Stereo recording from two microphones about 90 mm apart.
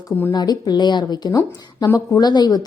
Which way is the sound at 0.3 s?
50° left (ahead or behind).